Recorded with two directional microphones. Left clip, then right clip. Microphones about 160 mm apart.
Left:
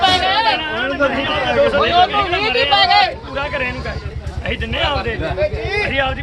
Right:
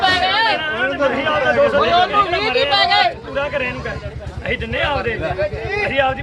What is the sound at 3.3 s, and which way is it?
Speech, 5° right (ahead or behind).